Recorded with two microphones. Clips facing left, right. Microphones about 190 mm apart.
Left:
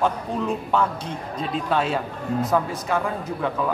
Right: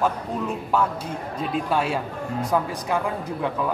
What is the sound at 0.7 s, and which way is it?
Speech, 10° right (ahead or behind).